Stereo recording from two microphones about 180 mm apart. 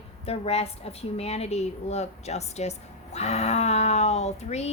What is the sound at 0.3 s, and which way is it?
A woman's voice, 35° left (ahead or behind).